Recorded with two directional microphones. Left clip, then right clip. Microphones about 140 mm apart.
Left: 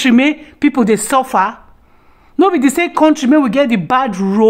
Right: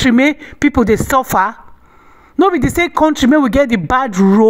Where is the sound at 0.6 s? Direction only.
35° right (ahead or behind); by 1.6 s 55° right (ahead or behind).